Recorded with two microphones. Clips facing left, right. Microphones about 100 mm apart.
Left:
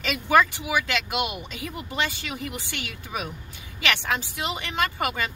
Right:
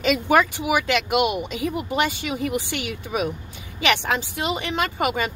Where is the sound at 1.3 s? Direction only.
20° right (ahead or behind).